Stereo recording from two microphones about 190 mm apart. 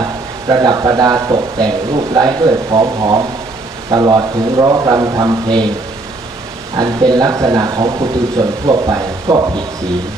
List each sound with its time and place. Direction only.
0.5 s speech: 20° right (ahead or behind)
6.8 s speech: 20° right (ahead or behind)